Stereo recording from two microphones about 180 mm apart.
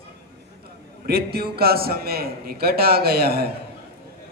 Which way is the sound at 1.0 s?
60° right (ahead or behind).